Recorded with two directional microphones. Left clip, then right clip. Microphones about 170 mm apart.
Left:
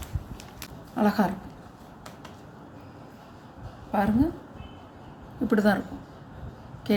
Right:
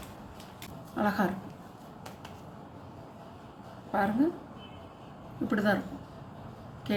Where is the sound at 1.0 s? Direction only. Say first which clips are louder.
Left 4 dB; 50° left (ahead or behind).